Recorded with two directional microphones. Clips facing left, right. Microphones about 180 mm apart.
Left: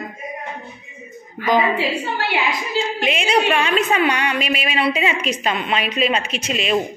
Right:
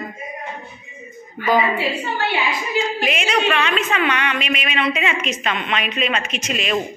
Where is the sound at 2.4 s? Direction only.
25° left (ahead or behind).